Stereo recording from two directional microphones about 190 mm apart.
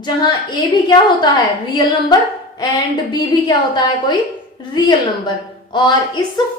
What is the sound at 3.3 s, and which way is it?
A woman's voice, 20° left (ahead or behind).